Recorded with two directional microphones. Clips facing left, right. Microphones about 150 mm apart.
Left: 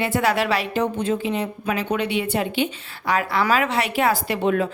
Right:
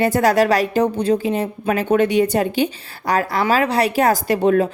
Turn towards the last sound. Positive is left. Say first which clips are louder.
# right 5 dB
turn(degrees=-40)  # may be behind; listen again after turning